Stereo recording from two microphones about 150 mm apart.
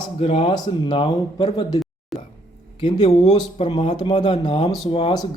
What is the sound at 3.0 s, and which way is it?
Speech, 45° left (ahead or behind).